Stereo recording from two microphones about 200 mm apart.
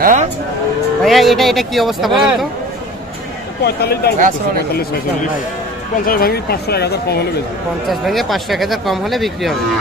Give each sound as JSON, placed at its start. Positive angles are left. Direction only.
{"t": 0.0, "sound": "speech", "side_deg": -40}
{"t": 1.0, "sound": "speech", "side_deg": 0}
{"t": 3.6, "sound": "speech", "side_deg": 50}
{"t": 6.0, "sound": "speech", "side_deg": 50}
{"t": 7.9, "sound": "speech", "side_deg": 0}